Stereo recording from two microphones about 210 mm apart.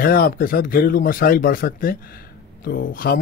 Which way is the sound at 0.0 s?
45° left (ahead or behind).